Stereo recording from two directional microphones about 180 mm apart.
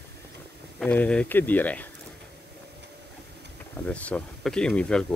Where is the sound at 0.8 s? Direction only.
5° left (ahead or behind).